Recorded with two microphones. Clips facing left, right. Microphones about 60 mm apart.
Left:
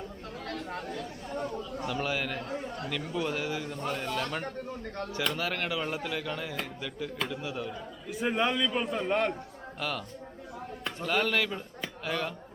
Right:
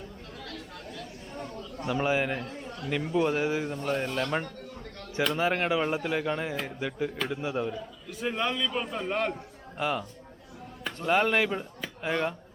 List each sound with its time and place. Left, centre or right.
0.4 s chatter: left
1.9 s a man's voice: right
3.2 s speech: right
8.1 s a man's voice: centre
9.7 s speech: right
11.0 s speech: right